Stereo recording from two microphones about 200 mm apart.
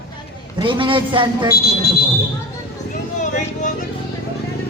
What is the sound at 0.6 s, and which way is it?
Speech, 25° right (ahead or behind).